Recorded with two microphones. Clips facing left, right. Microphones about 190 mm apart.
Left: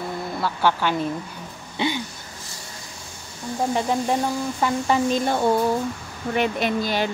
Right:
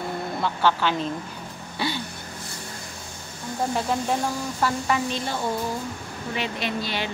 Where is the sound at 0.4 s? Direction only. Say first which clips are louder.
Left 1 dB; 10° left (ahead or behind).